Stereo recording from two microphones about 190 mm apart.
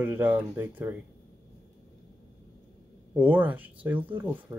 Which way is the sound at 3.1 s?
10° right (ahead or behind).